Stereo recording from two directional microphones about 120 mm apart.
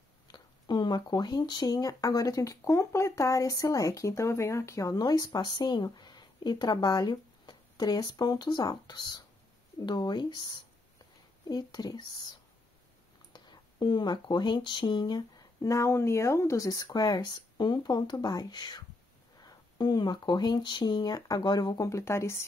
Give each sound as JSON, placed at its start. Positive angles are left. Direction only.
{"t": 0.3, "sound": "speech", "side_deg": 35}